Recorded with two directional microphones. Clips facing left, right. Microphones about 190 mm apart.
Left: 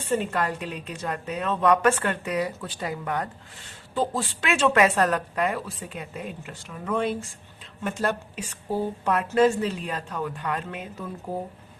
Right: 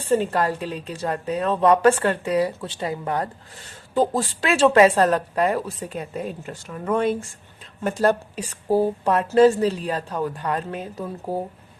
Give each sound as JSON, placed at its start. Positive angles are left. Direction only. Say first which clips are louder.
{"t": 0.0, "sound": "a woman's voice", "louder": "right 5 dB", "side_deg": -35}
{"t": 3.9, "sound": "a woman's voice", "louder": "right 6 dB", "side_deg": -40}
{"t": 7.9, "sound": "a woman's voice", "louder": "right 7 dB", "side_deg": -35}